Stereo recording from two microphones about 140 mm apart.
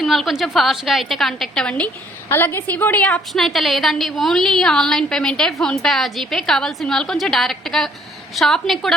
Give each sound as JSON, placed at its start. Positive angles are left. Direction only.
{"t": 0.0, "sound": "a woman's voice", "side_deg": 0}